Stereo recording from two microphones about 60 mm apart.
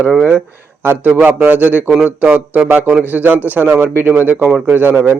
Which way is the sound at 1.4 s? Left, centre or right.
Right.